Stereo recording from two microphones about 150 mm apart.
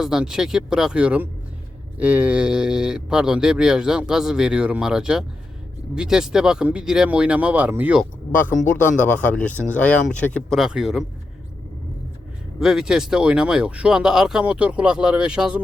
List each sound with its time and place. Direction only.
0.0 s speech: 5° right (ahead or behind)
8.6 s speech: 15° left (ahead or behind)
10.6 s speech: 5° right (ahead or behind)
12.5 s speech: 5° right (ahead or behind)